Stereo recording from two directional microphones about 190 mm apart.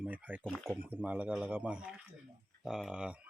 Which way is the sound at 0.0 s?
10° right (ahead or behind).